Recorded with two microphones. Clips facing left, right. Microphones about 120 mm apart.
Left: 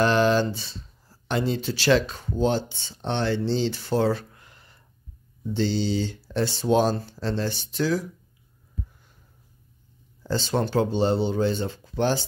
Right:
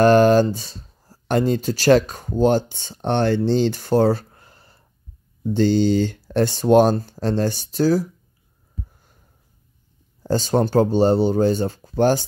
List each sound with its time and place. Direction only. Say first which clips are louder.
0.0 s speech: right 7 dB; 50° right (ahead or behind)
5.4 s speech: right 8 dB; 50° right (ahead or behind)
10.2 s speech: right 6 dB; 45° right (ahead or behind)